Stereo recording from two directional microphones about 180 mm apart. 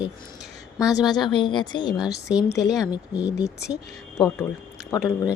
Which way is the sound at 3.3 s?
65° left (ahead or behind).